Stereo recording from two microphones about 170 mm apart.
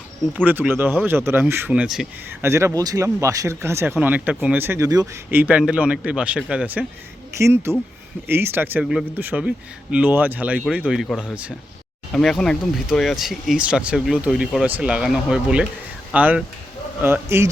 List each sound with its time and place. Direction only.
0.3 s speech: 10° right (ahead or behind)
2.4 s speech: 15° right (ahead or behind)
5.3 s speech: 10° right (ahead or behind)